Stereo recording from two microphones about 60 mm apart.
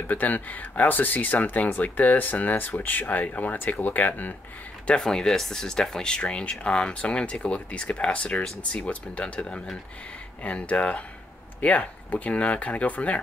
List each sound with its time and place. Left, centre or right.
0.1 s speech: left
4.8 s speech: centre